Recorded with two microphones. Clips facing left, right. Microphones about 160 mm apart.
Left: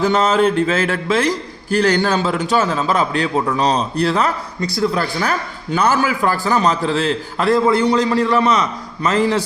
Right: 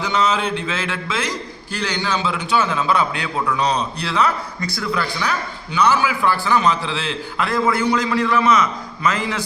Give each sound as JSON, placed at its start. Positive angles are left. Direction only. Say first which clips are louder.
{"t": 0.0, "sound": "a man's voice", "louder": "left 6 dB", "side_deg": 50}
{"t": 4.7, "sound": "a man's voice", "louder": "left 6 dB", "side_deg": 30}
{"t": 5.2, "sound": "a man's voice", "louder": "left 3 dB", "side_deg": 45}